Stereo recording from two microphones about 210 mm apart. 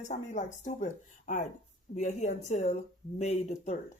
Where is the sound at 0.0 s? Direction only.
35° left (ahead or behind).